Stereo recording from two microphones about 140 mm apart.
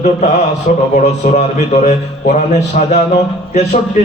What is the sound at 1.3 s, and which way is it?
A man's voice, 55° left (ahead or behind).